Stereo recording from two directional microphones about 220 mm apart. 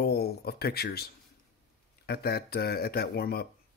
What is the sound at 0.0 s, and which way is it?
Speech, 45° left (ahead or behind).